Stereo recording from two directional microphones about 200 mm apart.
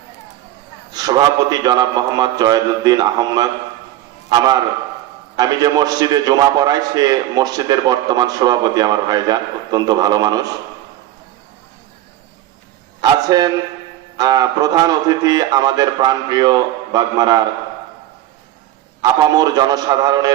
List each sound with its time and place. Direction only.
0.9 s a man's voice: 20° right (ahead or behind)
5.4 s a man's voice: 20° right (ahead or behind)
13.0 s a man's voice: 20° right (ahead or behind)
19.0 s a man's voice: 20° right (ahead or behind)